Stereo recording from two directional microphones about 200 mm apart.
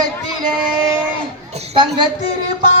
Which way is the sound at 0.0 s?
20° right (ahead or behind).